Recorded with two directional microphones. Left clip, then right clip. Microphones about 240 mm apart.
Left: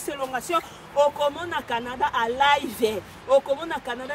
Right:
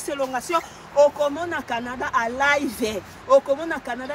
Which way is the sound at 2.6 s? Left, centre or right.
Left.